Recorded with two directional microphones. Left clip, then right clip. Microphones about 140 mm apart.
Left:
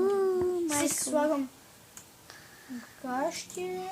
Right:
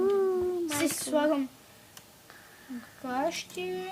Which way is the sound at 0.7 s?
15° left (ahead or behind).